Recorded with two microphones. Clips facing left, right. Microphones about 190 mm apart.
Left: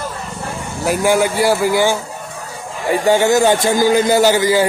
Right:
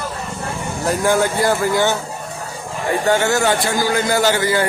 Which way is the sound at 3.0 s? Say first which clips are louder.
Left 5 dB; 15° left (ahead or behind).